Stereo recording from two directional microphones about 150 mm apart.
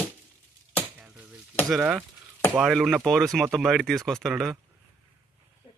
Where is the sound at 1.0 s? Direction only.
10° right (ahead or behind).